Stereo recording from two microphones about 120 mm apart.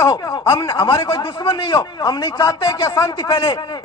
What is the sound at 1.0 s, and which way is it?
Speech, 25° left (ahead or behind).